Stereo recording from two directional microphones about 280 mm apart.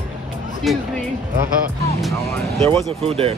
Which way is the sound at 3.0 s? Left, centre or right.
Right.